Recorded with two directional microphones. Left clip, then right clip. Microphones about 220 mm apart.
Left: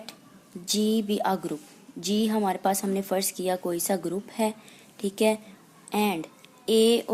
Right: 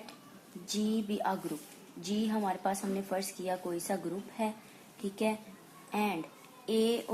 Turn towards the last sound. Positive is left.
turn(degrees=45)  # may be behind; listen again after turning